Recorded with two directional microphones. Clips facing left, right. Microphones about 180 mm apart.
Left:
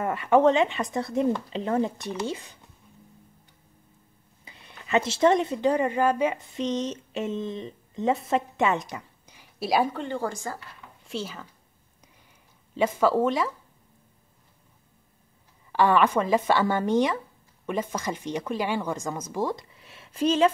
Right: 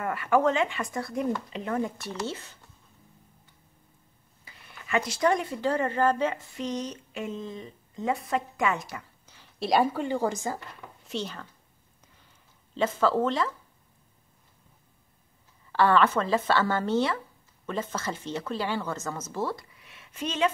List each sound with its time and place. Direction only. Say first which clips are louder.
0.0 s speech: left 4 dB; 20° left (ahead or behind)
4.5 s speech: left 4 dB; 20° left (ahead or behind); by 10.0 s centre (ahead or behind)
10.0 s speech: right 2 dB; 15° right (ahead or behind)
11.1 s speech: even; centre (ahead or behind)
12.7 s speech: left 2 dB; 10° left (ahead or behind)
15.7 s speech: left 1 dB; 15° left (ahead or behind)
19.8 s a sound: left 9 dB; 30° left (ahead or behind)